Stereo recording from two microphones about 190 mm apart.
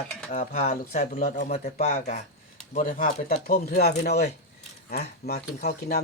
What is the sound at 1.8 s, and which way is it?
Speech, 35° left (ahead or behind).